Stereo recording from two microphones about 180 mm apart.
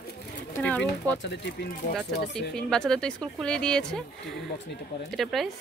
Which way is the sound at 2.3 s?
5° left (ahead or behind).